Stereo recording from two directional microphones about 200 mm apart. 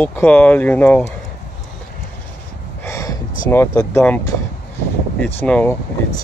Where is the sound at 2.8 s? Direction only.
15° left (ahead or behind).